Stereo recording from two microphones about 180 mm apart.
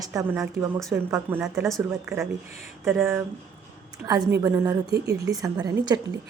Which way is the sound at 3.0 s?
10° right (ahead or behind).